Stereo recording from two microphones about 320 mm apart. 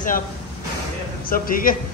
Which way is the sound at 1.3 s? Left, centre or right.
Left.